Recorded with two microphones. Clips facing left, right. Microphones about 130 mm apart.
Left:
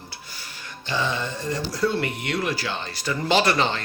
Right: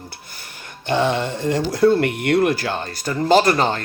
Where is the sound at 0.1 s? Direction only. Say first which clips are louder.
Right 1 dB; 50° right (ahead or behind).